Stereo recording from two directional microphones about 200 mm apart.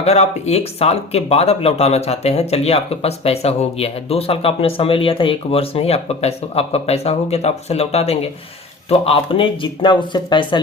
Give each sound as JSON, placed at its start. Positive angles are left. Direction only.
{"t": 0.0, "sound": "speech", "side_deg": 30}